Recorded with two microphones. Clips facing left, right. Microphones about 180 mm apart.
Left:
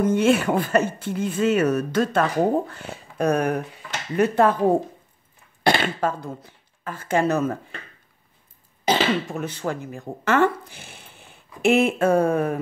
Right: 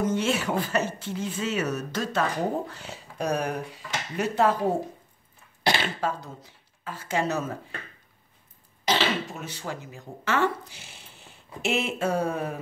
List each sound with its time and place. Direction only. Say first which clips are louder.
0.0 s speech: left 7 dB; 55° left (ahead or behind)
5.6 s speech: left 5 dB; 50° left (ahead or behind)
8.8 s speech: left 5 dB; 55° left (ahead or behind)